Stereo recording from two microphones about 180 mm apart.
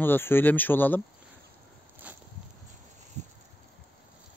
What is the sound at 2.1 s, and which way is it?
Walk, 10° right (ahead or behind).